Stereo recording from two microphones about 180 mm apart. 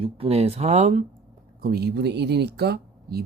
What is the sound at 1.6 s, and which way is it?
Speech, 60° right (ahead or behind).